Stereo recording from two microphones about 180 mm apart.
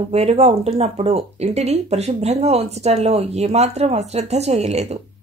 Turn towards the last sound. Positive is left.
turn(degrees=-35)  # may be behind; listen again after turning